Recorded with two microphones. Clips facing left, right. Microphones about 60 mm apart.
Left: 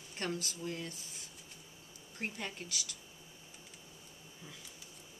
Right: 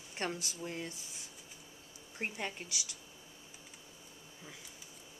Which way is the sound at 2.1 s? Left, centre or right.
Right.